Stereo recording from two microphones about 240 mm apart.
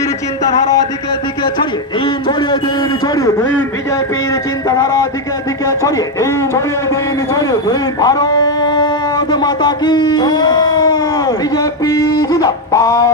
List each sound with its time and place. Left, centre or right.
1.4 s speech: centre
3.2 s a man's voice: centre